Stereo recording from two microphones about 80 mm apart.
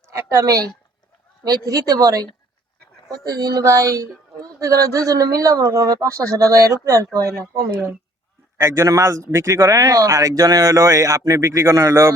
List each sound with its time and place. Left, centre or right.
0.1 s a man's voice: right
3.2 s a man's voice: right
8.5 s a man's voice: right